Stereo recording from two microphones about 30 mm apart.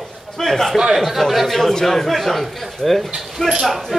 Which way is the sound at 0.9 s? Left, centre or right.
Centre.